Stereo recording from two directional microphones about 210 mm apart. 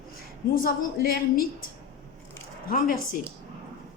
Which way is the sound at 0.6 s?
45° left (ahead or behind).